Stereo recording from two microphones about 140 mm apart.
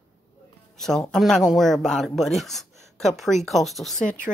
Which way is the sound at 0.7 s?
5° left (ahead or behind).